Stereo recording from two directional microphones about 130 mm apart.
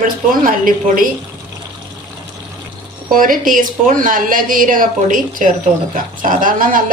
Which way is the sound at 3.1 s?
90° right.